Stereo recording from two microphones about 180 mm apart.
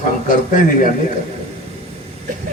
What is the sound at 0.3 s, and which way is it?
Speech, 45° left (ahead or behind).